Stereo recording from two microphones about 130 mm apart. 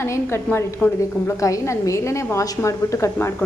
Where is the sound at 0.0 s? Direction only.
20° left (ahead or behind).